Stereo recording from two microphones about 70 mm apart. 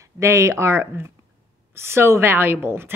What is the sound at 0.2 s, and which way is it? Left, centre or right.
Speech, right.